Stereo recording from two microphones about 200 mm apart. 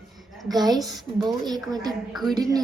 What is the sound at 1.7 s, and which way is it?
Speech, 20° right (ahead or behind).